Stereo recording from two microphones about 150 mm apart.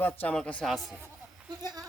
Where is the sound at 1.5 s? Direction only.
30° right (ahead or behind).